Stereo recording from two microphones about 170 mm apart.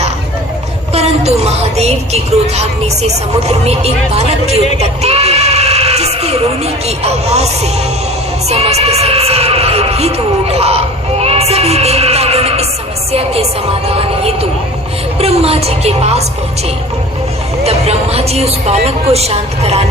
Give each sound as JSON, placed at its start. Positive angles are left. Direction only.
{"t": 0.9, "sound": "speech", "side_deg": -40}
{"t": 13.8, "sound": "speech", "side_deg": -35}
{"t": 17.6, "sound": "speech", "side_deg": -35}